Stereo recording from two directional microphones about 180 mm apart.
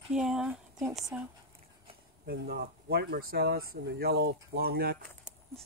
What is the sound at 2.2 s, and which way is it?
Speech, 60° right (ahead or behind).